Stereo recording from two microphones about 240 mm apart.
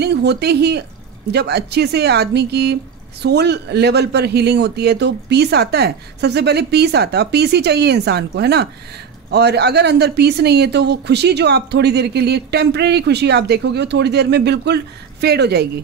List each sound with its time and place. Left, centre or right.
0.0 s speech: right